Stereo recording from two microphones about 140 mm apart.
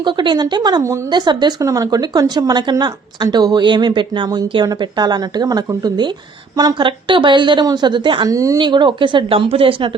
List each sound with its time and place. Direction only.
0.0 s speech: 35° right (ahead or behind)
1.1 s a woman's voice: 30° right (ahead or behind)
8.3 s a woman's voice: 25° right (ahead or behind); by 9.9 s 40° right (ahead or behind)